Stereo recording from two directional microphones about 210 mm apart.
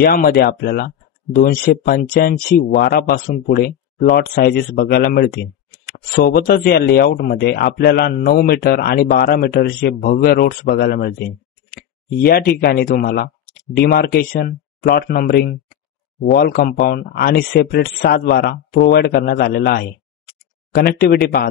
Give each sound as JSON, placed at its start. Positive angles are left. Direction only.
{"t": 0.0, "sound": "speech", "side_deg": 45}